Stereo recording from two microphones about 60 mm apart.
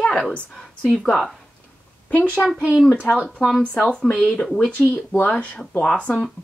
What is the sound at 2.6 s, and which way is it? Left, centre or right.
Speech, centre.